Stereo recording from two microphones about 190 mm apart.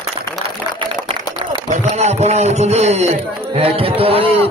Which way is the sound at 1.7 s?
35° right (ahead or behind).